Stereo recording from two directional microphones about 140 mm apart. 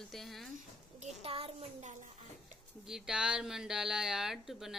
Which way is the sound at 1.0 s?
50° right (ahead or behind).